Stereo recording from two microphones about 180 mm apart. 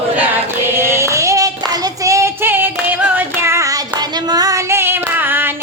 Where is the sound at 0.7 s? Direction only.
15° right (ahead or behind).